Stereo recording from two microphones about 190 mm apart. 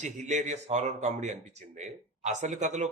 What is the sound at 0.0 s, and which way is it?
Speech, 40° right (ahead or behind).